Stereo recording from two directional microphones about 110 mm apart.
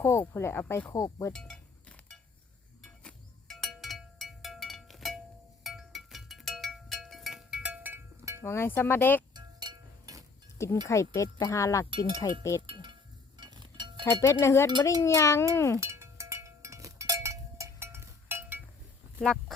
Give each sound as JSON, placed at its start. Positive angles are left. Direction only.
{"t": 0.0, "sound": "speech", "side_deg": 25}
{"t": 1.3, "sound": "chink", "side_deg": 5}
{"t": 2.8, "sound": "a sound", "side_deg": 5}
{"t": 5.6, "sound": "music", "side_deg": 0}
{"t": 8.4, "sound": "speech", "side_deg": 25}
{"t": 9.3, "sound": "music", "side_deg": -40}
{"t": 10.6, "sound": "speech", "side_deg": 25}
{"t": 12.6, "sound": "a sound", "side_deg": -45}
{"t": 14.2, "sound": "speech", "side_deg": 25}
{"t": 15.8, "sound": "a sound", "side_deg": -25}
{"t": 19.2, "sound": "speech", "side_deg": 5}